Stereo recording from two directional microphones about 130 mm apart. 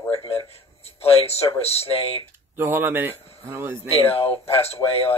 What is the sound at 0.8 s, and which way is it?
Speech, 50° left (ahead or behind).